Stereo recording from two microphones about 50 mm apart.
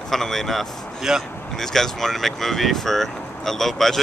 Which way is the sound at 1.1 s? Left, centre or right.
Centre.